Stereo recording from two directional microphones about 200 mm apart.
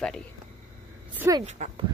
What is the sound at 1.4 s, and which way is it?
Speech, 35° right (ahead or behind).